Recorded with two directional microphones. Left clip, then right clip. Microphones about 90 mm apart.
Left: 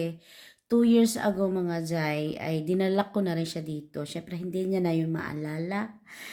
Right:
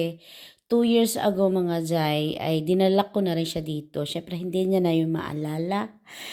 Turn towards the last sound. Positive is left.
turn(degrees=-35)  # may be behind; listen again after turning